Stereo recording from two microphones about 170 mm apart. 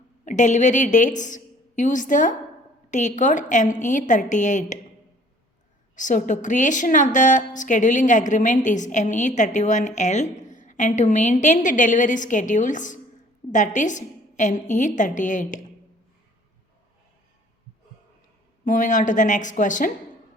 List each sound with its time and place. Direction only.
0.3 s a woman's voice: 45° left (ahead or behind)
6.0 s a woman's voice: 50° left (ahead or behind)
18.6 s a woman's voice: 50° left (ahead or behind)